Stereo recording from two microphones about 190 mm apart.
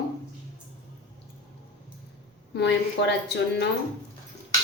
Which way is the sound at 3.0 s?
65° left (ahead or behind).